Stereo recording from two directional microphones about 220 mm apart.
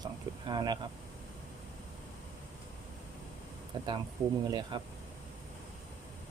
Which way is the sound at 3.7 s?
20° right (ahead or behind).